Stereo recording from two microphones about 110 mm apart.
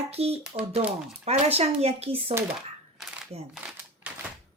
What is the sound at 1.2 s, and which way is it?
Speech, 70° right (ahead or behind).